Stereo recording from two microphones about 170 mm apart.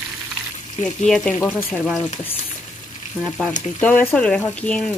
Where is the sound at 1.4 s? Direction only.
15° left (ahead or behind).